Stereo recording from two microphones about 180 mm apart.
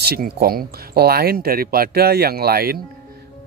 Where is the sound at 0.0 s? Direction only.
60° right (ahead or behind).